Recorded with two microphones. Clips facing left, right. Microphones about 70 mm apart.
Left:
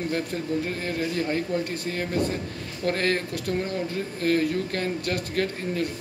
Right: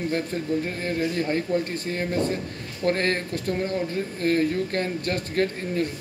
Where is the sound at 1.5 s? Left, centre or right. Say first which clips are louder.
Right 3 dB; right.